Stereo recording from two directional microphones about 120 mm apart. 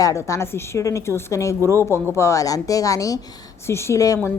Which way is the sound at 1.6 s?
25° right (ahead or behind).